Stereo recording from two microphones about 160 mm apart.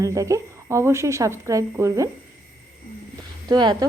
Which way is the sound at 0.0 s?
20° right (ahead or behind).